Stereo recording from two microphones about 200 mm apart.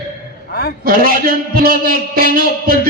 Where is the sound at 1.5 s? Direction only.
45° right (ahead or behind).